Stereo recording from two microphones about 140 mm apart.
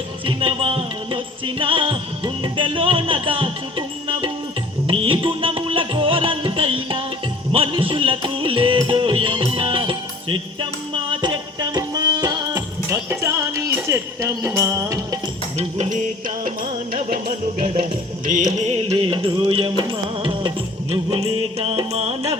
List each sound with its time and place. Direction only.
0.3 s music: 40° right (ahead or behind); by 15.2 s 25° right (ahead or behind)
15.5 s music: 55° right (ahead or behind)
16.9 s music: 90° right
18.3 s music: 65° right (ahead or behind); by 20.5 s 30° right (ahead or behind)
21.6 s music: 45° right (ahead or behind)